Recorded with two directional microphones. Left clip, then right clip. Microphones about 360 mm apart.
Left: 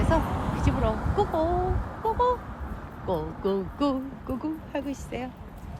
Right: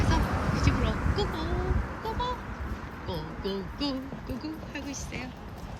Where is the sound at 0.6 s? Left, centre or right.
Centre.